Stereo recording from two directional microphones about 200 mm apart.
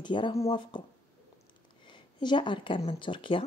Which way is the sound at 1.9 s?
25° left (ahead or behind).